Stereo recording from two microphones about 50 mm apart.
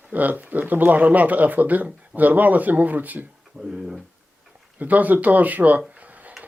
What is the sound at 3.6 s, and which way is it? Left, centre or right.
Speech, centre.